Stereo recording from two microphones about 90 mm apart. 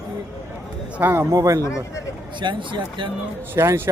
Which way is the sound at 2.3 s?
60° right (ahead or behind).